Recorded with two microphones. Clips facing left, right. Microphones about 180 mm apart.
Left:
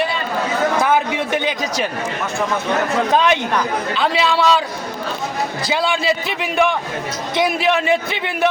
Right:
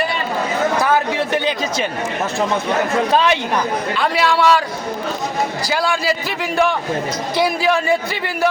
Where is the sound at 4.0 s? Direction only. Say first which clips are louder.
Right 1 dB; centre (ahead or behind).